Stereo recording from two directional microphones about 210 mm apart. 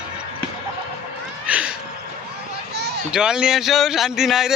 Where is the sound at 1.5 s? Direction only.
5° right (ahead or behind).